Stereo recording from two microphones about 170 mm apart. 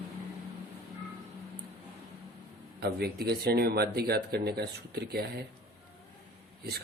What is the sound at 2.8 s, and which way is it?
Speech, 70° right (ahead or behind).